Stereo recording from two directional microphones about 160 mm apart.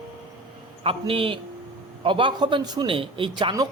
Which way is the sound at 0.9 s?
35° right (ahead or behind).